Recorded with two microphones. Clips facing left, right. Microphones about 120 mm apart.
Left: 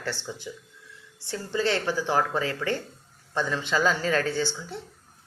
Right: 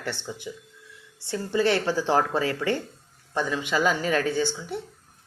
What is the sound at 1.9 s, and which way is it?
A man's voice, 20° right (ahead or behind).